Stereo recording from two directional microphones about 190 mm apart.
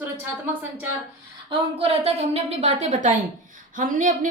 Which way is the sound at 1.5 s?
30° right (ahead or behind).